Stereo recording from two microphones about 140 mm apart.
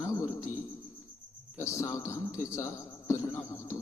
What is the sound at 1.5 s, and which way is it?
A man's voice, 20° left (ahead or behind).